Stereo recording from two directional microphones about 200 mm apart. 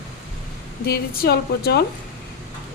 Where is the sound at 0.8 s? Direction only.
50° left (ahead or behind).